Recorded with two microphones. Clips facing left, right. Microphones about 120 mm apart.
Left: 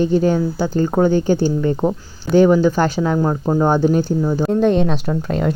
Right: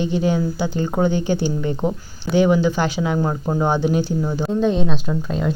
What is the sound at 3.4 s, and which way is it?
Speech, 30° left (ahead or behind).